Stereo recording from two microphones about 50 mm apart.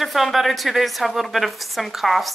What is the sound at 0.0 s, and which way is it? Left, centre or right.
Speech, centre.